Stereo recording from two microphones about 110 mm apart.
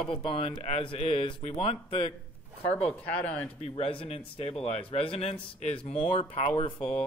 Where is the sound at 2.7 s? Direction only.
10° left (ahead or behind).